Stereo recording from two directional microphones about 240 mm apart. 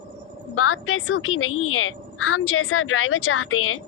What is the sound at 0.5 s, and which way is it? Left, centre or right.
A woman's voice, left.